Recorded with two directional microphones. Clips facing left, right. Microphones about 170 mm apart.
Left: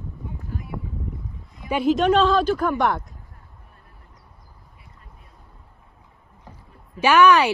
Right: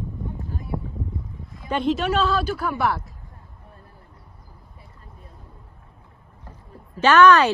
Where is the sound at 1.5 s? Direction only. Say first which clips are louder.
Left 2 dB; 10° left (ahead or behind).